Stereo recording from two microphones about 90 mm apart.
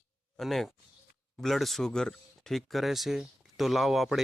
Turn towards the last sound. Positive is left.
turn(degrees=-5)  # may be behind; listen again after turning